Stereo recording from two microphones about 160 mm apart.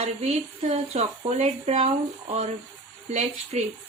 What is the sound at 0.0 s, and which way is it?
Speech, 45° right (ahead or behind).